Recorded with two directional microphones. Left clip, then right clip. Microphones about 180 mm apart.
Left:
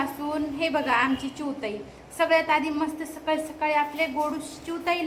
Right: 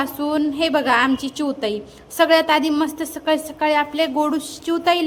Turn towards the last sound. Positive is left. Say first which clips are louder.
# right 9 dB
turn(degrees=-40)  # may be behind; listen again after turning